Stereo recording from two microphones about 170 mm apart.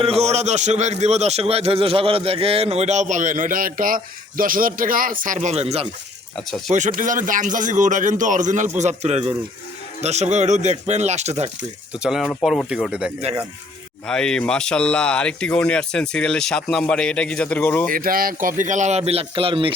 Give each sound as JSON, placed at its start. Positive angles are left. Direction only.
{"t": 0.0, "sound": "a man's voice", "side_deg": -35}
{"t": 6.7, "sound": "a man's voice", "side_deg": -50}
{"t": 12.0, "sound": "speech", "side_deg": -5}
{"t": 17.9, "sound": "speech", "side_deg": -55}